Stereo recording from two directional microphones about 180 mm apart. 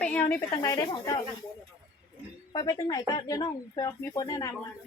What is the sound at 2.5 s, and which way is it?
Speech, 20° left (ahead or behind).